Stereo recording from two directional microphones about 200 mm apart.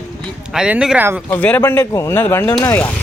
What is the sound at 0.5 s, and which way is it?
Speech, 5° right (ahead or behind).